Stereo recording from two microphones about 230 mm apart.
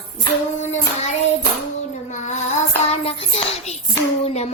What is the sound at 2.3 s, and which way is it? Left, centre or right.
Child singing, left.